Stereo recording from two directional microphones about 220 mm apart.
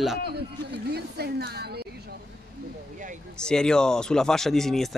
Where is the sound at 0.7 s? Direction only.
45° right (ahead or behind).